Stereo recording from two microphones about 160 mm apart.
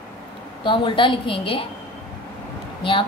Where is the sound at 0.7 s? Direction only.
30° left (ahead or behind).